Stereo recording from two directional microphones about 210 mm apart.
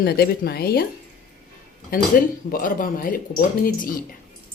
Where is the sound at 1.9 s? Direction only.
45° left (ahead or behind).